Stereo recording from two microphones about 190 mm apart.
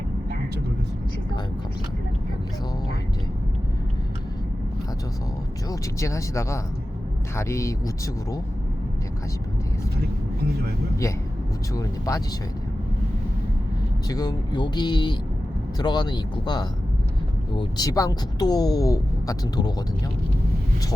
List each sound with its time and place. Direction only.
5.6 s speech: 15° left (ahead or behind)
11.7 s speech: 15° left (ahead or behind)
14.1 s speech: 20° left (ahead or behind)